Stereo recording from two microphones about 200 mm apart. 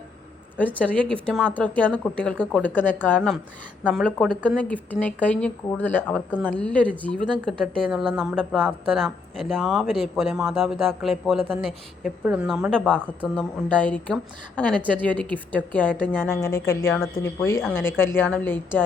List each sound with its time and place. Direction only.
0.8 s a woman's voice: 5° left (ahead or behind)